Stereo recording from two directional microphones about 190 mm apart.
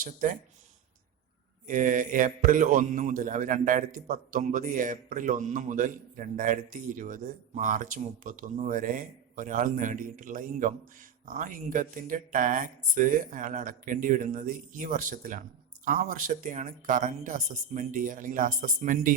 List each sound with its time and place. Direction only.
0.0 s a man's voice: 45° right (ahead or behind)
1.6 s a man's voice: 45° right (ahead or behind)